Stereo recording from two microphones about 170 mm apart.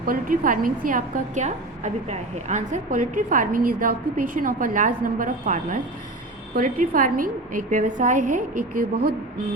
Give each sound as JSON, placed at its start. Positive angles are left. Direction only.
{"t": 0.0, "sound": "a woman's voice", "side_deg": -55}